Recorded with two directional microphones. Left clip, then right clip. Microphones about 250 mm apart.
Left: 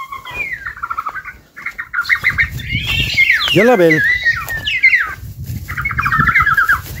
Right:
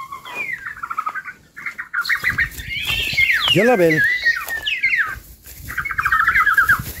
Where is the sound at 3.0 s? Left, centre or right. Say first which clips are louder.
Left 5 dB; centre.